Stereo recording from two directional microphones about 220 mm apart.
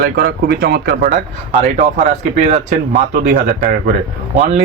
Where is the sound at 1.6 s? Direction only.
30° right (ahead or behind).